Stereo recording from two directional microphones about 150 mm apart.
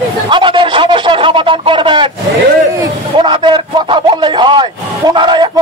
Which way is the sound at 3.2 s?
35° right (ahead or behind).